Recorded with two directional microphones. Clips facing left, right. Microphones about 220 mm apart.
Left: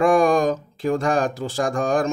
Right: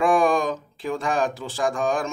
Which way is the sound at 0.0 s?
40° left (ahead or behind).